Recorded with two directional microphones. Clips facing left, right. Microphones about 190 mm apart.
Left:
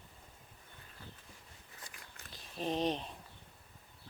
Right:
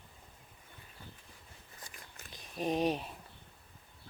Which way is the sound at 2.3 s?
15° right (ahead or behind).